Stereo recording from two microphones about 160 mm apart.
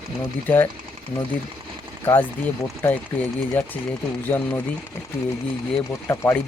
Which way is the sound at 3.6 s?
10° left (ahead or behind).